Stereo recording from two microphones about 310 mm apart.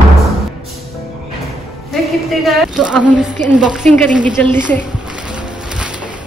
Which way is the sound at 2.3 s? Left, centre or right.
Centre.